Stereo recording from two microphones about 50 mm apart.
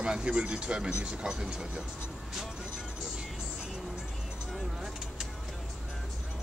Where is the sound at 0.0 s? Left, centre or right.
Centre.